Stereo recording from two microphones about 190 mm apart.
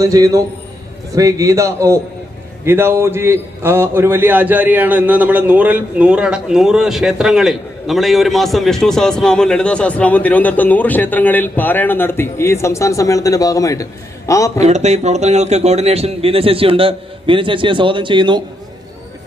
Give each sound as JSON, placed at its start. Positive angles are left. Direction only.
{"t": 0.0, "sound": "a man's voice", "side_deg": -15}
{"t": 14.6, "sound": "speech", "side_deg": -35}